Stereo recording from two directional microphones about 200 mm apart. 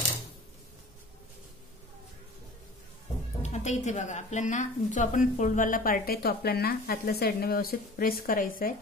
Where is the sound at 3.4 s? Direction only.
35° left (ahead or behind).